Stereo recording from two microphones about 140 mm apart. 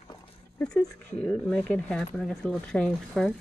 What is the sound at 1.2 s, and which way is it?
Speech, 5° left (ahead or behind).